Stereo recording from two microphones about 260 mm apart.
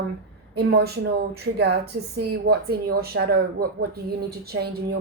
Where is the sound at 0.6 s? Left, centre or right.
Right.